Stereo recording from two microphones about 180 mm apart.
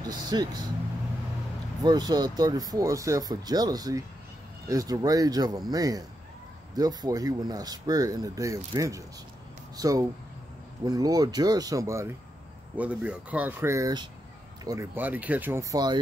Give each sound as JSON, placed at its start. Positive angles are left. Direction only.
{"t": 0.0, "sound": "speech", "side_deg": -20}
{"t": 1.8, "sound": "speech", "side_deg": -20}